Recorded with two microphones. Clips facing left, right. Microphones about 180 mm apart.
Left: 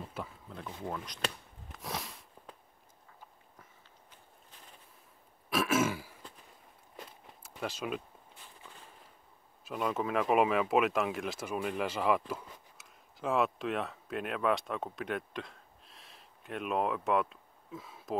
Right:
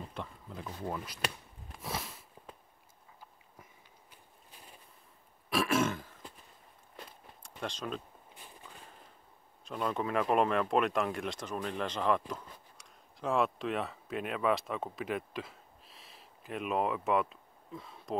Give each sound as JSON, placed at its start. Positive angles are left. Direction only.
{"t": 0.0, "sound": "speech", "side_deg": 5}
{"t": 1.7, "sound": "sniff", "side_deg": 0}
{"t": 4.1, "sound": "walk", "side_deg": -10}
{"t": 5.5, "sound": "throat clearing", "side_deg": 0}
{"t": 7.0, "sound": "walk", "side_deg": 5}
{"t": 8.4, "sound": "a sound", "side_deg": -15}
{"t": 9.7, "sound": "speech", "side_deg": 5}